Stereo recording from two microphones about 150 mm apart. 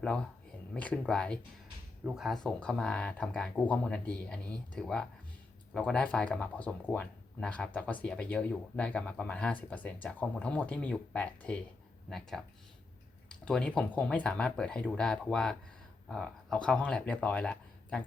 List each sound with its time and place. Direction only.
0.0 s speech: 5° left (ahead or behind)